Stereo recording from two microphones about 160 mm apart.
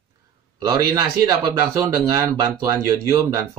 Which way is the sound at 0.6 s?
20° right (ahead or behind).